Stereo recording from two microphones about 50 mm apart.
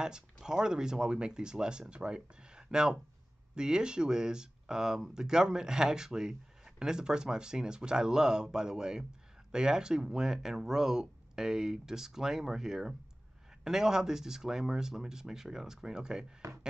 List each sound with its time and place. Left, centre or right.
0.0 s speech: centre